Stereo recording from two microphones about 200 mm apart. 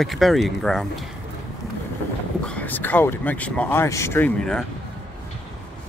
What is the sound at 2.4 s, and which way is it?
Speech, 5° left (ahead or behind).